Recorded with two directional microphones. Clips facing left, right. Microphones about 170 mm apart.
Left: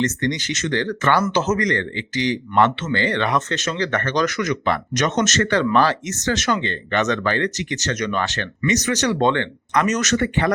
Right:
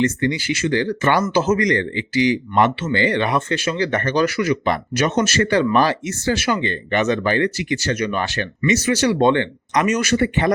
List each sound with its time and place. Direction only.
0.0 s speech: 10° right (ahead or behind)